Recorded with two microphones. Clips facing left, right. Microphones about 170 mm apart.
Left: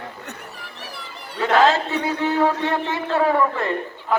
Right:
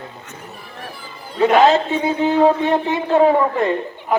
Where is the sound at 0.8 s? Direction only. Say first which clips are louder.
Right 3 dB; 75° left (ahead or behind).